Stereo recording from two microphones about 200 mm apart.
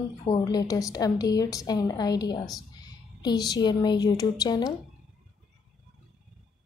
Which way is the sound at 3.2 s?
20° left (ahead or behind).